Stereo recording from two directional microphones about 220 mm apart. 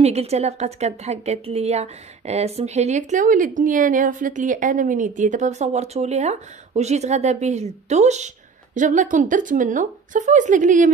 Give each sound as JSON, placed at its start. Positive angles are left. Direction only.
{"t": 0.0, "sound": "a woman's voice", "side_deg": -30}